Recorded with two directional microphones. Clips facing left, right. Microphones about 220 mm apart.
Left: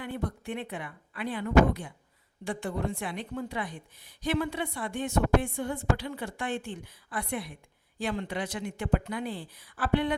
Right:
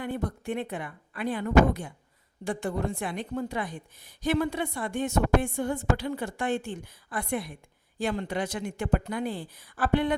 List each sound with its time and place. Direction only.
0.0 s a woman's voice: 45° right (ahead or behind)